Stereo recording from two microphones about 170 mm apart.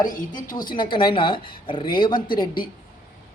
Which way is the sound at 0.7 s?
30° left (ahead or behind).